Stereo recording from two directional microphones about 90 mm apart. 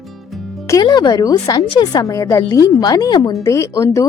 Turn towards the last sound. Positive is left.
turn(degrees=40)  # may be behind; listen again after turning